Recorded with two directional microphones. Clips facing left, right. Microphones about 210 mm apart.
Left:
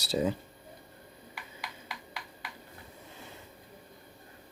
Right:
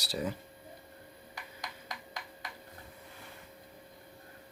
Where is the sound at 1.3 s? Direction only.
45° right (ahead or behind).